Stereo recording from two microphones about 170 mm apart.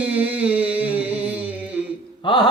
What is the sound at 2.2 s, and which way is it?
Speech, 25° left (ahead or behind).